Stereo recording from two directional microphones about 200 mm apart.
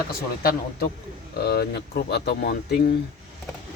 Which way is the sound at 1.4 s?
55° left (ahead or behind).